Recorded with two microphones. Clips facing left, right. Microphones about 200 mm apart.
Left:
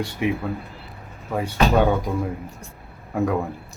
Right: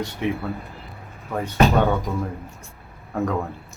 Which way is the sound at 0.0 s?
10° left (ahead or behind).